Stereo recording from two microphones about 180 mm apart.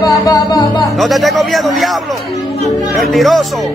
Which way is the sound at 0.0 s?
20° left (ahead or behind).